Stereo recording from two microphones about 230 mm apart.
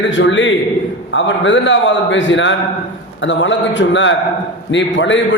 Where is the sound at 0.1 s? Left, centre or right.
Left.